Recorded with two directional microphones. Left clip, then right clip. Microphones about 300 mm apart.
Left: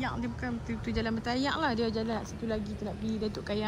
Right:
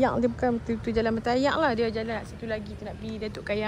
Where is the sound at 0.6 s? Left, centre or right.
Left.